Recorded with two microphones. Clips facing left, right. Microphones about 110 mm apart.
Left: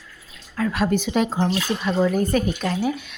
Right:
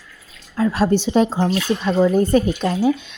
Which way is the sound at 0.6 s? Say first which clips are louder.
Right 4 dB; 30° right (ahead or behind).